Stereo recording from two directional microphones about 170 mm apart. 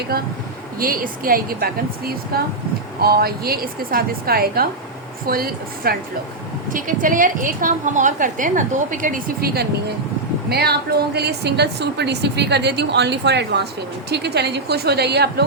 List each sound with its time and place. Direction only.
0.1 s a woman's voice: 65° right (ahead or behind)
10.5 s a woman's voice: 70° right (ahead or behind)